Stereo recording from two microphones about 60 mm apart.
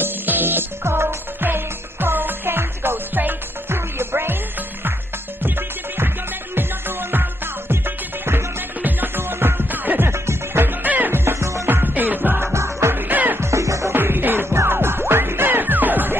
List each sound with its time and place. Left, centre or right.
0.0 s music: right
5.9 s music: right
10.1 s music: right
11.6 s music: right
12.5 s music: right
12.9 s music: right
13.4 s music: right
13.9 s music: right